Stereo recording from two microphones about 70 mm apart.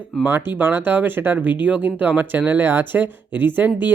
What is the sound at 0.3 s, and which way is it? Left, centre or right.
Speech, right.